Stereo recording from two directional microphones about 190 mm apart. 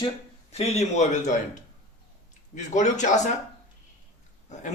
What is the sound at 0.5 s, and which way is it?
Speech, 35° left (ahead or behind).